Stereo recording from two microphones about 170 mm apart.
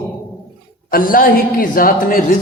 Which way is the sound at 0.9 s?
55° left (ahead or behind).